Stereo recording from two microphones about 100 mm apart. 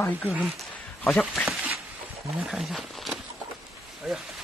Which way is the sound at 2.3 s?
5° right (ahead or behind).